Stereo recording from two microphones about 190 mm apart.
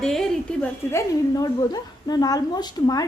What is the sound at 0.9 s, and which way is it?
A woman's voice, 15° left (ahead or behind).